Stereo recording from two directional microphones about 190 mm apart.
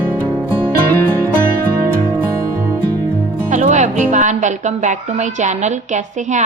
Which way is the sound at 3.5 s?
40° right (ahead or behind).